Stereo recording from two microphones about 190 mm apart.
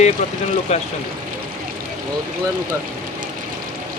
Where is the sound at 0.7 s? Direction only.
35° left (ahead or behind).